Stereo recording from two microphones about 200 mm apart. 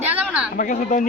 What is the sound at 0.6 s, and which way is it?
Speech, 40° left (ahead or behind).